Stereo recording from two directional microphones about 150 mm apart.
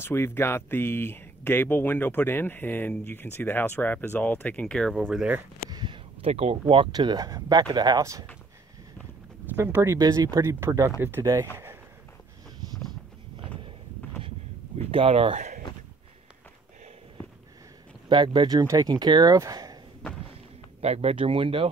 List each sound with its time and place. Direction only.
0.0 s speech: 15° left (ahead or behind)
5.1 s speech: 10° right (ahead or behind)
5.7 s a sound: 30° right (ahead or behind)
6.2 s speech: 40° right (ahead or behind); by 8.3 s 25° right (ahead or behind)
9.6 s speech: 15° right (ahead or behind)
14.9 s speech: 40° right (ahead or behind)
15.3 s speech: 55° right (ahead or behind)
18.0 s speech: 30° right (ahead or behind)
20.8 s speech: 45° right (ahead or behind)